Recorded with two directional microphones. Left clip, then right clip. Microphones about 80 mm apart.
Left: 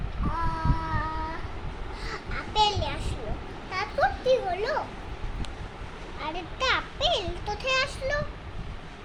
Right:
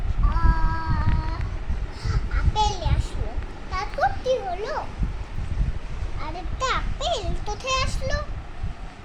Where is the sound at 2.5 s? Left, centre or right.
Centre.